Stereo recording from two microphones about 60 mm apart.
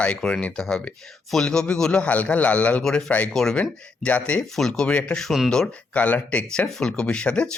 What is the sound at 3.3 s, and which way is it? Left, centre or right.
Speech, centre.